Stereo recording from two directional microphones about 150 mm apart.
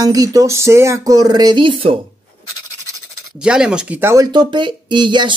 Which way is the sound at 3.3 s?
5° right (ahead or behind).